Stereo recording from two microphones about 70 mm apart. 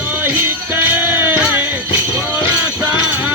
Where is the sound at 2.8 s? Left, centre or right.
Right.